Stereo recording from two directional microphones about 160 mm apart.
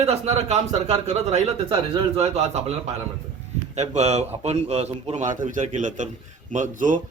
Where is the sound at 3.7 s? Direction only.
45° right (ahead or behind).